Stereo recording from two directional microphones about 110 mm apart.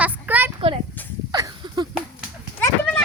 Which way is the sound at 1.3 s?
40° right (ahead or behind).